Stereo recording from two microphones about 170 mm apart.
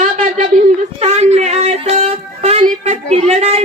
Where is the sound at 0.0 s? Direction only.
45° right (ahead or behind).